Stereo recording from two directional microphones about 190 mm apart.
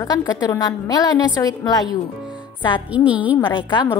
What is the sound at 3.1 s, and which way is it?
Speech, 10° right (ahead or behind).